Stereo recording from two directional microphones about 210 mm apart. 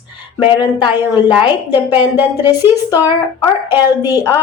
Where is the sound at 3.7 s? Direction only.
10° right (ahead or behind).